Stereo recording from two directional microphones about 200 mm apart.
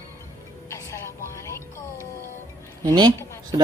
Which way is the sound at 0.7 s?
15° left (ahead or behind).